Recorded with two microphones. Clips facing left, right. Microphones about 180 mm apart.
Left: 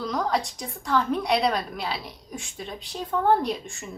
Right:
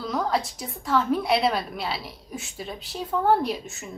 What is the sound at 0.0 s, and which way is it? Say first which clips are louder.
A woman's voice: even; 5° right (ahead or behind).